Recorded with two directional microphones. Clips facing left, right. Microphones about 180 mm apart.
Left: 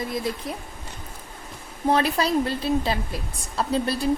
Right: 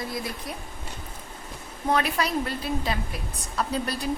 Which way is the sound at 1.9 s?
30° left (ahead or behind).